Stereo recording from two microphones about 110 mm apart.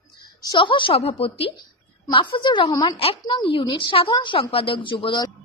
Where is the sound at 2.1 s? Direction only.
45° left (ahead or behind).